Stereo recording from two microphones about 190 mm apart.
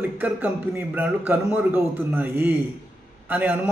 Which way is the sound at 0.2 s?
10° right (ahead or behind).